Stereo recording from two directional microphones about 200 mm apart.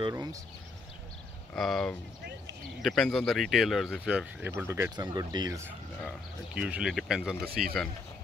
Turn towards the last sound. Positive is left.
turn(degrees=0)  # may be behind; listen again after turning